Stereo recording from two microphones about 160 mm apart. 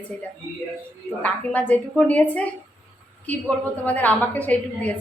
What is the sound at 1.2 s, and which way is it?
A woman's voice, 10° left (ahead or behind).